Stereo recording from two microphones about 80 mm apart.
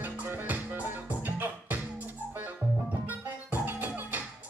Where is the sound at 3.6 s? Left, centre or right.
Right.